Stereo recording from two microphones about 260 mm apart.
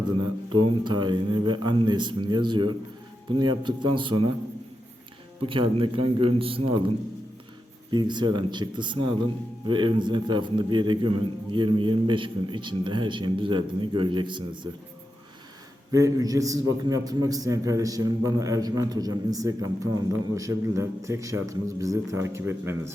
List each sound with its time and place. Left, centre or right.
0.6 s a man's voice: centre
5.4 s speech: centre
7.9 s a man's voice: centre
15.9 s a man's voice: centre